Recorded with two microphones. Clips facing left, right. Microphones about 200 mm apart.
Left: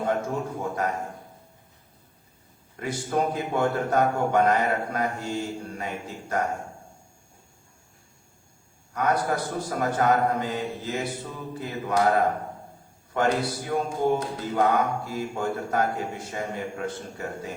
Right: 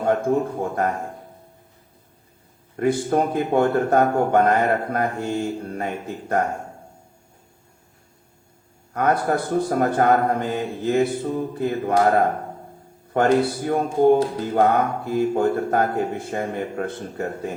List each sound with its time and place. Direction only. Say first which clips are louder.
0.0 s a man's voice: right 7 dB; 55° right (ahead or behind)
2.7 s a man's voice: right 7 dB; 55° right (ahead or behind)
8.9 s a man's voice: right 4 dB; 55° right (ahead or behind)